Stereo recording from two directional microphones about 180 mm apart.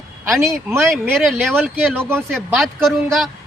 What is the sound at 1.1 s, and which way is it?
Speech, centre (ahead or behind).